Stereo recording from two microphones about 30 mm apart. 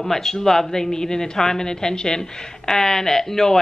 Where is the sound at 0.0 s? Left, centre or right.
Centre.